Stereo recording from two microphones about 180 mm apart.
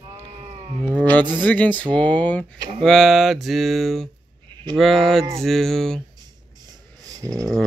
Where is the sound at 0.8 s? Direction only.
10° left (ahead or behind).